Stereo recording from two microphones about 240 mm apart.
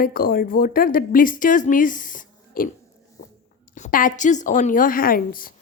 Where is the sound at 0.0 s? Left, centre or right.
Left.